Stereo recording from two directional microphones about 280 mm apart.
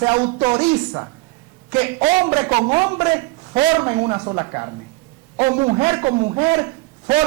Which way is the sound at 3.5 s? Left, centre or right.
Centre.